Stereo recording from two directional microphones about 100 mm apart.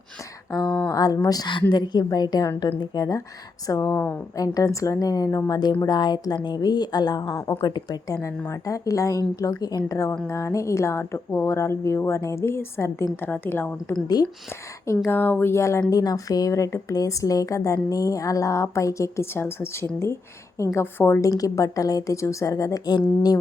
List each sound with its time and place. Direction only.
0.9 s a woman's voice: 35° left (ahead or behind)
3.7 s a woman's voice: 30° left (ahead or behind)
4.4 s a woman's voice: 35° left (ahead or behind)
7.3 s a woman's voice: 25° left (ahead or behind)
7.6 s a woman's voice: 40° left (ahead or behind)
15.9 s a woman's voice: 40° left (ahead or behind)